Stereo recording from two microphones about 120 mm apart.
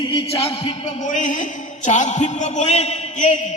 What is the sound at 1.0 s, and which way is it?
A man's voice, 90° left.